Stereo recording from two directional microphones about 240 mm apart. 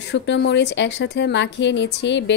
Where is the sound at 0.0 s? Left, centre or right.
Left.